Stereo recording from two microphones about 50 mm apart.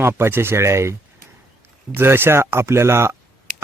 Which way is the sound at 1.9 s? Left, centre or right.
Right.